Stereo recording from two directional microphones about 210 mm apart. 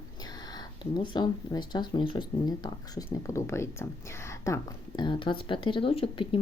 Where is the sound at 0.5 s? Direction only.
20° left (ahead or behind).